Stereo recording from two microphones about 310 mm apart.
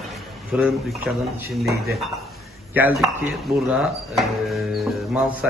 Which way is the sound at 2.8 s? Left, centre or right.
Centre.